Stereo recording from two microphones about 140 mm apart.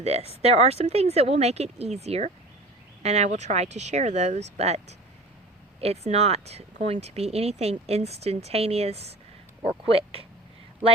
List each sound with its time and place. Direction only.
0.0 s speech: 50° right (ahead or behind)